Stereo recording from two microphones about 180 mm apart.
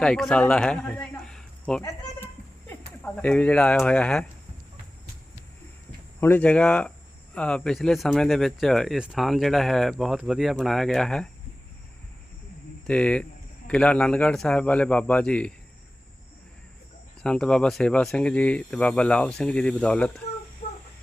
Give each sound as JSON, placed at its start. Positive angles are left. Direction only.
{"t": 0.0, "sound": "speech", "side_deg": 5}
{"t": 1.2, "sound": "a sound", "side_deg": 5}
{"t": 2.6, "sound": "speech", "side_deg": 10}
{"t": 6.1, "sound": "a man's voice", "side_deg": 10}
{"t": 12.9, "sound": "a man's voice", "side_deg": 5}
{"t": 17.2, "sound": "speech", "side_deg": 5}
{"t": 20.6, "sound": "a sound", "side_deg": 40}